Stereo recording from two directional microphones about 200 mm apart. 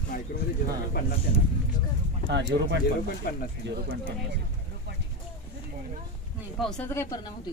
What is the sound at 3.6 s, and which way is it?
Speech, 60° right (ahead or behind).